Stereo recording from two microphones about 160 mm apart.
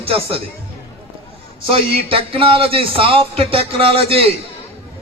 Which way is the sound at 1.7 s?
35° right (ahead or behind).